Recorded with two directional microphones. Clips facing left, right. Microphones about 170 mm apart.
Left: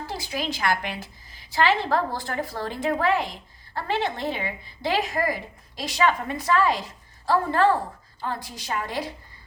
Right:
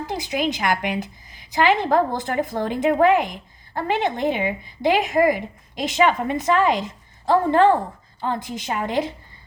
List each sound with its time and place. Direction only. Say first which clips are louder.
0.0 s a woman's voice: right 6 dB; 20° right (ahead or behind)